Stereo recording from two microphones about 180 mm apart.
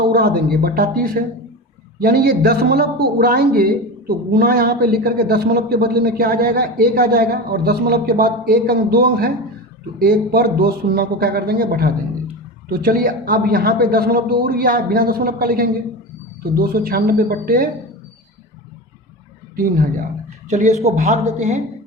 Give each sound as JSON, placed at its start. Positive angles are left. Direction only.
{"t": 0.1, "sound": "a man's voice", "side_deg": -55}
{"t": 20.5, "sound": "speech", "side_deg": -40}